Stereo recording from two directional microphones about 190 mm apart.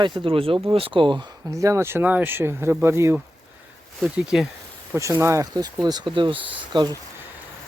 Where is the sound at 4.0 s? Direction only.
Centre (ahead or behind).